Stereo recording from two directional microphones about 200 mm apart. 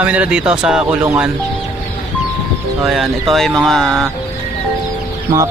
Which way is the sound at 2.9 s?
Centre (ahead or behind).